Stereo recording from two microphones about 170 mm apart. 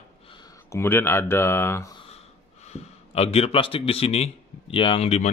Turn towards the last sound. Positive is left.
turn(degrees=35)  # may be behind; listen again after turning